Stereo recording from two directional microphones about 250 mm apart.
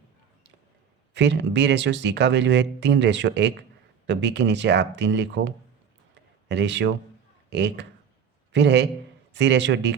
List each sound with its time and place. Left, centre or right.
1.1 s speech: right